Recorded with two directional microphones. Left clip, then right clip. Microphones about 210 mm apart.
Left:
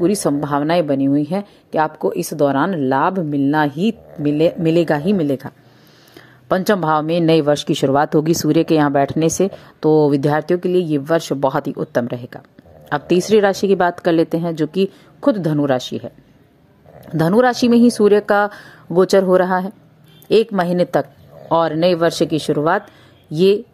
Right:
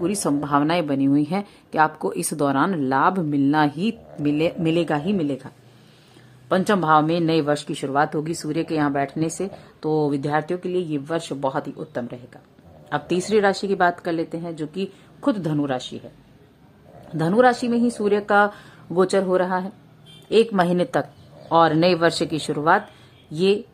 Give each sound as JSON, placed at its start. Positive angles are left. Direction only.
{"t": 0.0, "sound": "a woman's voice", "side_deg": 20}
{"t": 6.5, "sound": "speech", "side_deg": 25}
{"t": 15.2, "sound": "speech", "side_deg": 15}
{"t": 17.2, "sound": "speech", "side_deg": 30}
{"t": 20.5, "sound": "speech", "side_deg": 15}